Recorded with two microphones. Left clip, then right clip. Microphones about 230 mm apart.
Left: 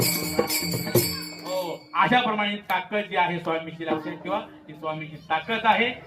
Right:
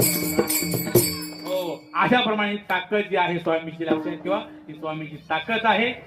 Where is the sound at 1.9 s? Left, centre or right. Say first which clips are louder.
Right 1 dB; left.